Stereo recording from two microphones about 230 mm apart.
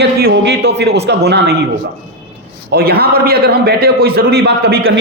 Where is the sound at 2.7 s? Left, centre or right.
Right.